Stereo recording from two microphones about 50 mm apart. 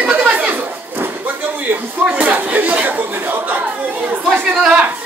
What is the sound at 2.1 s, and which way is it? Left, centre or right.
Chatter, right.